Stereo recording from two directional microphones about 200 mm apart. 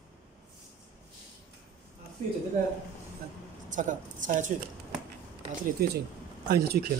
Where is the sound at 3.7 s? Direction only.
40° right (ahead or behind).